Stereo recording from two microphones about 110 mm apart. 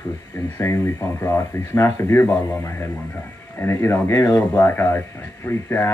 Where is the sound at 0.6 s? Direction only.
25° left (ahead or behind).